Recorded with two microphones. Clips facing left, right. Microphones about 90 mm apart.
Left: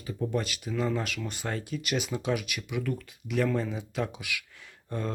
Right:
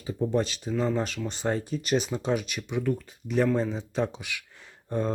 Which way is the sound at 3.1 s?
35° right (ahead or behind).